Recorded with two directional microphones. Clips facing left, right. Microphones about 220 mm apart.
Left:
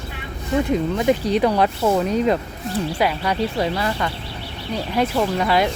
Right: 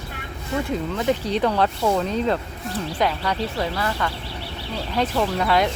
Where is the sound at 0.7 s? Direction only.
15° left (ahead or behind).